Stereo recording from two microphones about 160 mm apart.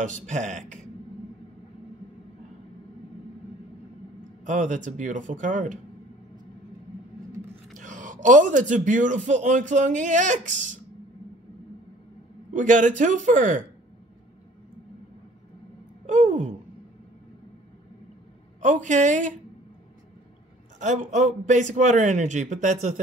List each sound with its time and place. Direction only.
0.0 s a man's voice: 50° right (ahead or behind)
4.5 s a man's voice: 50° right (ahead or behind)
7.7 s a man's voice: 55° right (ahead or behind)
12.5 s a man's voice: 55° right (ahead or behind)
16.1 s a sound: 50° right (ahead or behind)
18.6 s a woman's voice: 50° right (ahead or behind)
20.8 s a man's voice: 50° right (ahead or behind)